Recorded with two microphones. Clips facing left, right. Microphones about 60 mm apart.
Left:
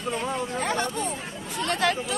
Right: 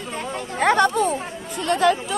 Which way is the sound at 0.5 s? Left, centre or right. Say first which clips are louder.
Right 14 dB; right.